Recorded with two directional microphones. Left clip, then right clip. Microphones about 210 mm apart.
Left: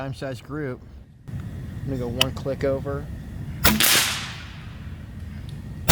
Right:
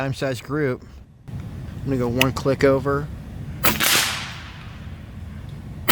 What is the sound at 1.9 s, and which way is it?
Speech, 55° right (ahead or behind).